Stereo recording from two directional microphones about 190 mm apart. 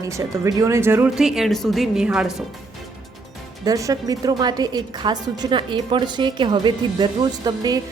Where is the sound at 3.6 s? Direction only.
15° right (ahead or behind).